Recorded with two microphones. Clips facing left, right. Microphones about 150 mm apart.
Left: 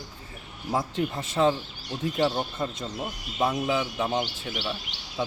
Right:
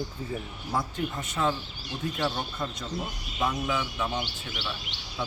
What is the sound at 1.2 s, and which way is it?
Speech, 30° left (ahead or behind).